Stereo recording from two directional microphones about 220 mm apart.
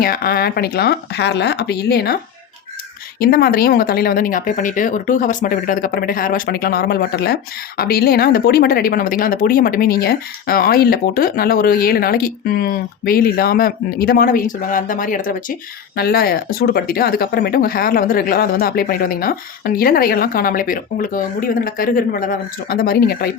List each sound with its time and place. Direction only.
0.0 s speech: 45° left (ahead or behind)
3.2 s speech: 45° left (ahead or behind)